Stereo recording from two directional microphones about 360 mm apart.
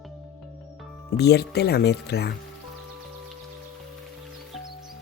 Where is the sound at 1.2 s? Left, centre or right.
Left.